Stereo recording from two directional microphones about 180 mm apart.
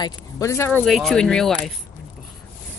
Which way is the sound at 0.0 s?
15° left (ahead or behind).